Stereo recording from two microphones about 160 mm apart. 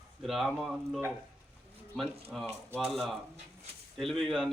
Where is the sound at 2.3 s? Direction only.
Centre (ahead or behind).